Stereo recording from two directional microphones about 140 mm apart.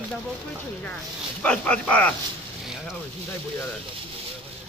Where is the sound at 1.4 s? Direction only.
10° left (ahead or behind).